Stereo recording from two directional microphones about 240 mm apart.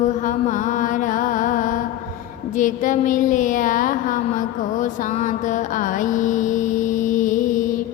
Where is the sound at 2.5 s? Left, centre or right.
Left.